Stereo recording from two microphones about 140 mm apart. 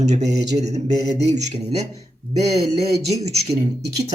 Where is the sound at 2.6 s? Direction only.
50° right (ahead or behind).